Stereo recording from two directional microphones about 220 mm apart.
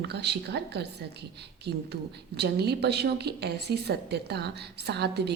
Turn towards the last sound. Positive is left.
turn(degrees=-50)  # may be behind; listen again after turning